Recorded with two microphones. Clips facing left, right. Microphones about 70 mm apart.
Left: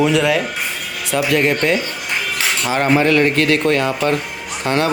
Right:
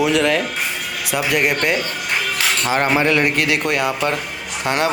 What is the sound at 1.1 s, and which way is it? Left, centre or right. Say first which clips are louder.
Speech: left 3 dB; centre.